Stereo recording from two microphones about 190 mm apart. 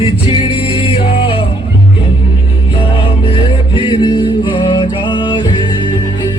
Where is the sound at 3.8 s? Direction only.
25° left (ahead or behind).